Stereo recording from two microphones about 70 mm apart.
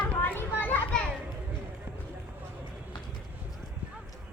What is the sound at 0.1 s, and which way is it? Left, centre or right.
Children playing, left.